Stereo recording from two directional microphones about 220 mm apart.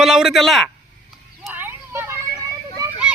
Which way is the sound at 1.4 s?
10° right (ahead or behind).